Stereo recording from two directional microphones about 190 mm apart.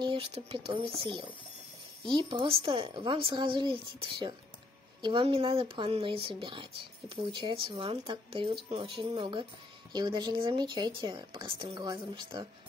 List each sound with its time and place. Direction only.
0.0 s speech: 30° right (ahead or behind)
2.0 s speech: 25° right (ahead or behind)